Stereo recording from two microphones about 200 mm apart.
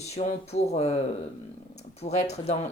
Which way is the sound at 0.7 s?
35° left (ahead or behind).